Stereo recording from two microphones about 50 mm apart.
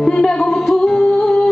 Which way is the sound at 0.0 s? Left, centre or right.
Centre.